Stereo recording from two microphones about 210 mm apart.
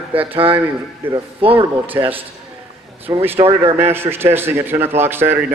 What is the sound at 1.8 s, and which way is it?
A man's voice, 10° right (ahead or behind).